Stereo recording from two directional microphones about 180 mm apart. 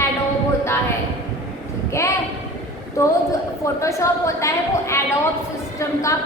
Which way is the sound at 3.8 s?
15° left (ahead or behind).